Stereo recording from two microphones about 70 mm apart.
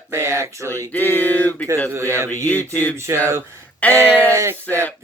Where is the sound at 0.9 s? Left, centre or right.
Left.